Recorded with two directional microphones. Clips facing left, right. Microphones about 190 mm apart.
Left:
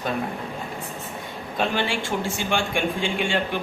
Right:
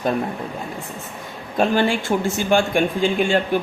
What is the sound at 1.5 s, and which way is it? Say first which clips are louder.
Speech: right 6 dB; 45° right (ahead or behind).